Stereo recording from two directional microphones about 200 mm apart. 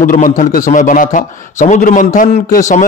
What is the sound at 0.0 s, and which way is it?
A man's voice, 40° left (ahead or behind).